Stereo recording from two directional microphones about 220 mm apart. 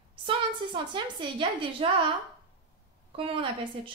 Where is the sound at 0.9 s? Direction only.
20° right (ahead or behind).